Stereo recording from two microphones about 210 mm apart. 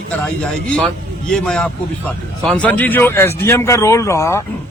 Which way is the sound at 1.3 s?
5° left (ahead or behind).